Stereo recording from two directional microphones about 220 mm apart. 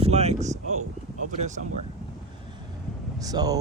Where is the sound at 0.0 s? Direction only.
30° right (ahead or behind).